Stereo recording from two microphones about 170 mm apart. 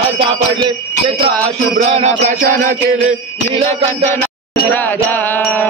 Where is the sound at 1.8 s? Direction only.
45° right (ahead or behind).